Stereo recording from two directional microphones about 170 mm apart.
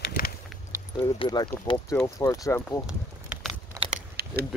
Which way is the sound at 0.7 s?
25° left (ahead or behind).